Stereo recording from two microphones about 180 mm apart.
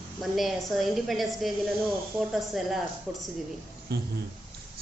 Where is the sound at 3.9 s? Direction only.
65° right (ahead or behind).